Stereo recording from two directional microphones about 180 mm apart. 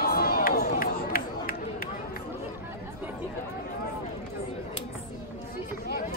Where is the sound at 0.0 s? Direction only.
60° left (ahead or behind).